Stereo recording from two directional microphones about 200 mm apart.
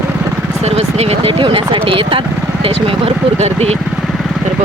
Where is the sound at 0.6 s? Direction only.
30° right (ahead or behind).